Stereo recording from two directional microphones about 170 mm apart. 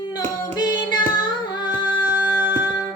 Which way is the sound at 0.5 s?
25° left (ahead or behind).